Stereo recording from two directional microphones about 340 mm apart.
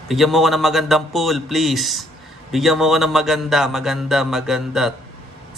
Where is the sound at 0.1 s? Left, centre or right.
Centre.